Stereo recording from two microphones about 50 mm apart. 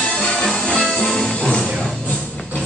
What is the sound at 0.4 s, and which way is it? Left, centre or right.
Music, centre.